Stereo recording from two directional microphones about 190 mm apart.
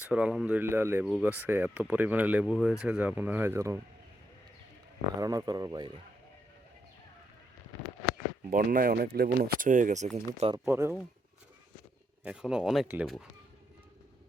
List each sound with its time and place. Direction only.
0.1 s speech: 5° right (ahead or behind)
5.2 s speech: 20° right (ahead or behind)
8.4 s speech: 45° right (ahead or behind)
10.3 s speech: 30° right (ahead or behind)
10.7 s speech: 15° right (ahead or behind)
12.2 s speech: 5° right (ahead or behind)